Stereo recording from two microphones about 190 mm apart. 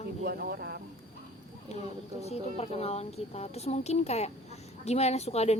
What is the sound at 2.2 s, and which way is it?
A woman's voice, 35° left (ahead or behind).